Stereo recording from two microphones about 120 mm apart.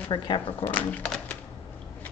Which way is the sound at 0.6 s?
15° left (ahead or behind).